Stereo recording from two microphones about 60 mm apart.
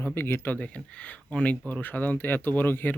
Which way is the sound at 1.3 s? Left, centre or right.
Left.